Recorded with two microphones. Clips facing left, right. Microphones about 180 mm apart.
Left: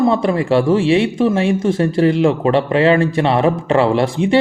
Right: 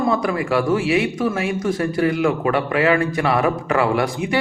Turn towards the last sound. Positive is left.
turn(degrees=25)  # may be behind; listen again after turning